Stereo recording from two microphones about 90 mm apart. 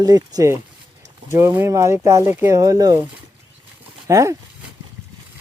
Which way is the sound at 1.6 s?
35° right (ahead or behind).